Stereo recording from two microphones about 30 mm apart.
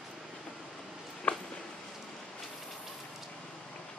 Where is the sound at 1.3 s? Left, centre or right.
Left.